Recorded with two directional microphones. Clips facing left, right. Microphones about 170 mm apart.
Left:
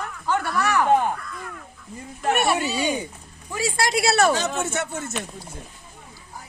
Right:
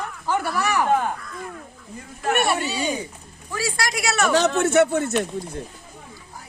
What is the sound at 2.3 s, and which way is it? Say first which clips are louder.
Speech: right 1 dB; centre (ahead or behind).